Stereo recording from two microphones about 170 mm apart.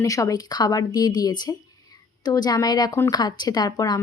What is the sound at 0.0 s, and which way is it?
Speech, 20° left (ahead or behind).